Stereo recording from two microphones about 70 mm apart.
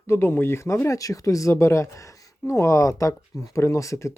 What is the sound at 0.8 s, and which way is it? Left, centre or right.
Speech, left.